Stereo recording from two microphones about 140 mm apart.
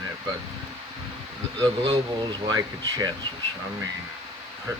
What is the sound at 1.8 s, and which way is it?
Speech, 30° right (ahead or behind).